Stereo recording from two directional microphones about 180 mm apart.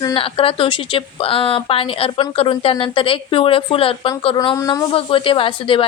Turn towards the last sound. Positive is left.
turn(degrees=30)  # may be behind; listen again after turning